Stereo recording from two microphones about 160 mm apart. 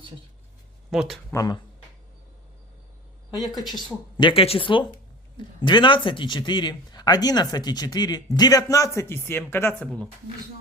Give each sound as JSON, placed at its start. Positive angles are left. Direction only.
{"t": 0.9, "sound": "speech", "side_deg": 0}
{"t": 1.3, "sound": "speech", "side_deg": 20}
{"t": 3.6, "sound": "speech", "side_deg": 0}
{"t": 4.2, "sound": "speech", "side_deg": 35}